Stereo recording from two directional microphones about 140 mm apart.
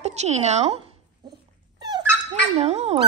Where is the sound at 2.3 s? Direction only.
50° right (ahead or behind).